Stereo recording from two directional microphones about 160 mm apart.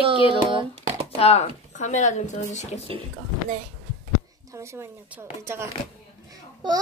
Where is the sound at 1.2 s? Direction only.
40° left (ahead or behind).